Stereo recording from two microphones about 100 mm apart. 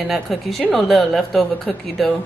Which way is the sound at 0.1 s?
Centre (ahead or behind).